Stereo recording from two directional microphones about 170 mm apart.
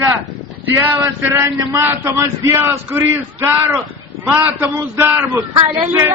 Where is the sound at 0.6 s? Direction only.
15° right (ahead or behind).